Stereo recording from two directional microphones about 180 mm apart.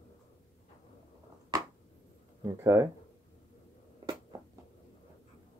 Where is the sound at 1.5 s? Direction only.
20° right (ahead or behind).